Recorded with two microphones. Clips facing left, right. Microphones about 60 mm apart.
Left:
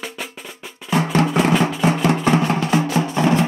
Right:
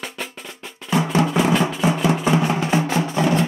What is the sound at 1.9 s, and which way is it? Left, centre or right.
Music, left.